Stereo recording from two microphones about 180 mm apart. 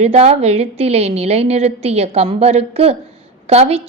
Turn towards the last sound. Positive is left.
turn(degrees=-35)  # may be behind; listen again after turning